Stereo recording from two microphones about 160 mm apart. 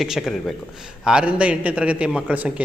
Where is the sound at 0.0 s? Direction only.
Centre (ahead or behind).